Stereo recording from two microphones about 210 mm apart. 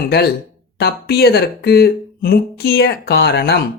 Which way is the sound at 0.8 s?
50° left (ahead or behind).